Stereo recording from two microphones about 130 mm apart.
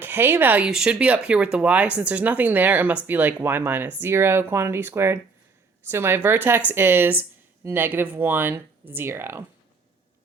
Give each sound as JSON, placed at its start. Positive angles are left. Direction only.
{"t": 0.0, "sound": "speech", "side_deg": -15}